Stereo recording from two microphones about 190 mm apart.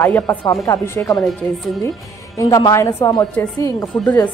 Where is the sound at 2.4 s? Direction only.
15° left (ahead or behind).